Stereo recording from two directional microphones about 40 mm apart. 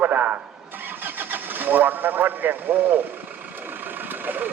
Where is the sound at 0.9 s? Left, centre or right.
Right.